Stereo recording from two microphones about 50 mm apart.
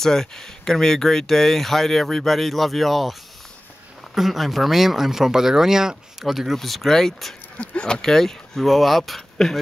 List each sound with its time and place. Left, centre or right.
0.0 s speech: centre
7.5 s speech: left
8.0 s speech: centre